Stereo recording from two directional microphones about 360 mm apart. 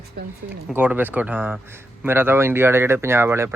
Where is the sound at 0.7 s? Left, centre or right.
Centre.